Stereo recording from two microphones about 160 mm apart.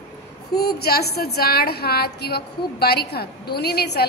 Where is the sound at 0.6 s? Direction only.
75° left (ahead or behind).